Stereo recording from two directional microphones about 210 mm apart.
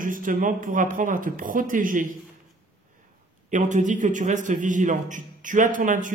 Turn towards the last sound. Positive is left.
turn(degrees=-40)  # may be behind; listen again after turning